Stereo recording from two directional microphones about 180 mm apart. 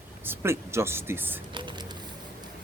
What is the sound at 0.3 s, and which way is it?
Speech, 15° right (ahead or behind).